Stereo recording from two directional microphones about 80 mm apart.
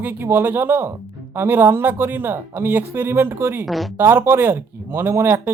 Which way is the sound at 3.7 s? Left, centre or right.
Centre.